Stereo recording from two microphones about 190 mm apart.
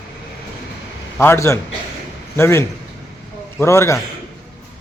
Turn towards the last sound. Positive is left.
turn(degrees=15)  # may be behind; listen again after turning